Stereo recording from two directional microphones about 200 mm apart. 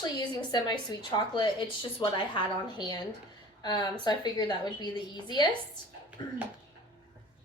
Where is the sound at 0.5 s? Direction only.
20° left (ahead or behind).